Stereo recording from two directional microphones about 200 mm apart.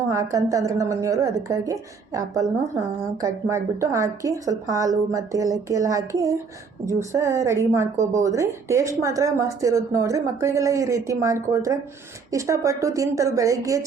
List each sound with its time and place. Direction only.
0.1 s a woman's voice: 15° right (ahead or behind)